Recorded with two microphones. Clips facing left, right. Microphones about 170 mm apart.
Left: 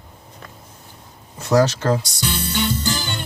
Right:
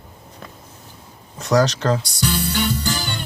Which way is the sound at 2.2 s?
20° left (ahead or behind).